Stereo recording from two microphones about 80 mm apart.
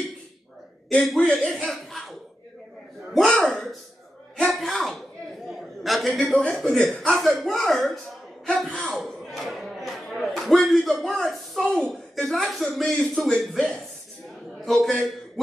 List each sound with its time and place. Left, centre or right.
1.0 s speech: centre
5.5 s a sound: centre
6.2 s a man's voice: centre